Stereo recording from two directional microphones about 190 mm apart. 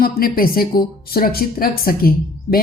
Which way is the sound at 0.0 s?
50° left (ahead or behind).